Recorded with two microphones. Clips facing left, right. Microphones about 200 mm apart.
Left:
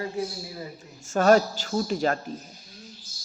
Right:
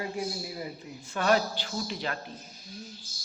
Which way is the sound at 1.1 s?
45° left (ahead or behind).